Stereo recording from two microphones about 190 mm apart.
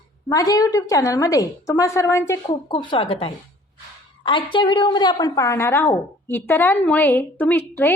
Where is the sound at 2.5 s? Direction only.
25° left (ahead or behind).